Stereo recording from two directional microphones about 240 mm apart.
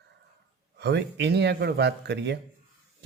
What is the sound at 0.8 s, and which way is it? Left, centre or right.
Speech, right.